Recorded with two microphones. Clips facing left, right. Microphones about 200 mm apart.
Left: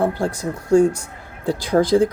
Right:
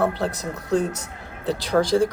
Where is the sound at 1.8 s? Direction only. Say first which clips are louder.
Left 5 dB; 55° left (ahead or behind).